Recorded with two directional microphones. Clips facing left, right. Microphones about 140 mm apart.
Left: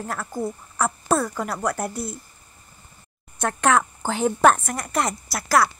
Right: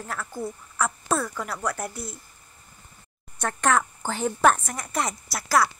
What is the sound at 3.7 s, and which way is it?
A woman's voice, 70° left (ahead or behind).